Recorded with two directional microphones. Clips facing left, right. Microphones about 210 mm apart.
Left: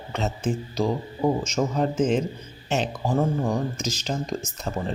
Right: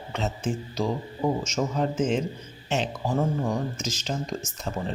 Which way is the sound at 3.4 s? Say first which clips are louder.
Left 2 dB; 35° left (ahead or behind).